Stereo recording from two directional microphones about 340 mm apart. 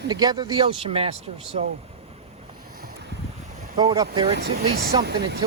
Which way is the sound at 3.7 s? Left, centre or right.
Centre.